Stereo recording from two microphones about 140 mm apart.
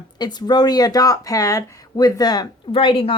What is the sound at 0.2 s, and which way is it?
Speech, 30° left (ahead or behind).